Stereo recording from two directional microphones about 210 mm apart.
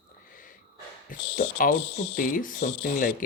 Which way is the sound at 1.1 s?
40° left (ahead or behind).